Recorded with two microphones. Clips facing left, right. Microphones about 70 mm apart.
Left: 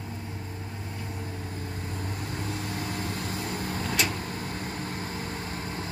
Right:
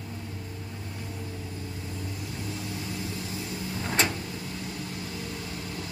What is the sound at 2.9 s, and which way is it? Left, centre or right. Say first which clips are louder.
Vehicle: left 2 dB; left.